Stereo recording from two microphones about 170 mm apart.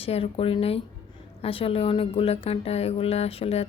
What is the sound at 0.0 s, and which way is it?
Speech, 35° left (ahead or behind).